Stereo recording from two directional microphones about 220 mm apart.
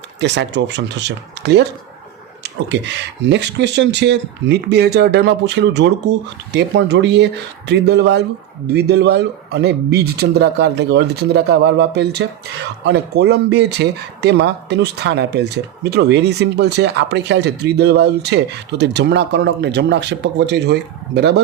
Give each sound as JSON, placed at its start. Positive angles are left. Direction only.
{"t": 0.2, "sound": "speech", "side_deg": -50}